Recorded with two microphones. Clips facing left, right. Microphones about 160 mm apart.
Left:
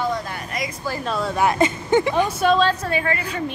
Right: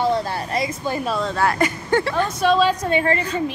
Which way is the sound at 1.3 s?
20° left (ahead or behind).